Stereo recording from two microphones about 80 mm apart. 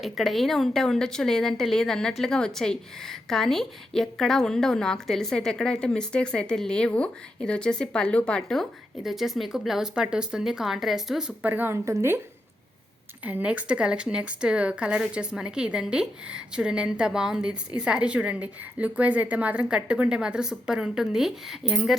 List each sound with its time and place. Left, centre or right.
0.0 s a woman's voice: centre
11.4 s a woman's voice: right
11.7 s a woman's voice: right
13.2 s speech: centre